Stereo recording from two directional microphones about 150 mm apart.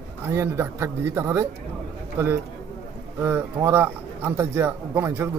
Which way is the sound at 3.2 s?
15° right (ahead or behind).